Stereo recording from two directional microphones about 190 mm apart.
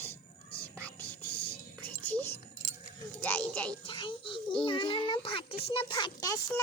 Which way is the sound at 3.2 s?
10° left (ahead or behind).